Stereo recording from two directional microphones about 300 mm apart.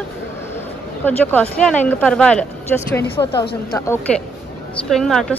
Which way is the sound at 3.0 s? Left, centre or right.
Centre.